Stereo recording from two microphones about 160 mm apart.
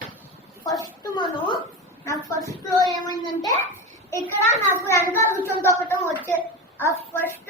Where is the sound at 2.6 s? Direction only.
20° left (ahead or behind).